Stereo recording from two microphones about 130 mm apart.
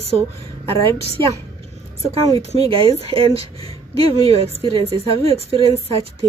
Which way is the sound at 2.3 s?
45° right (ahead or behind).